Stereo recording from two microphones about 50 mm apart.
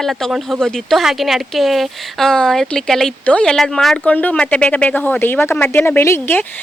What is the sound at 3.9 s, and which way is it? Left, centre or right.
Speech, left.